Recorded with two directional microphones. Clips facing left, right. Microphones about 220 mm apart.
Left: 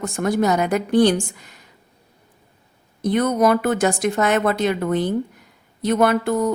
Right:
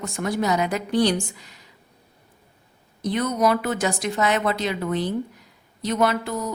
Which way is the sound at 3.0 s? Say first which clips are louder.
Left 4 dB; 50° left (ahead or behind).